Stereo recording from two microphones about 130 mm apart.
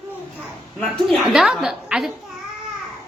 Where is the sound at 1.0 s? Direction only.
Centre (ahead or behind).